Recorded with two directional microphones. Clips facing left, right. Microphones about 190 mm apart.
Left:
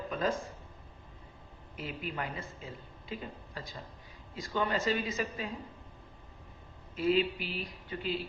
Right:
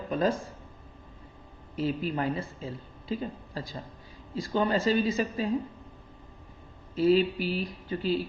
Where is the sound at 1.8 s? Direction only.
30° right (ahead or behind).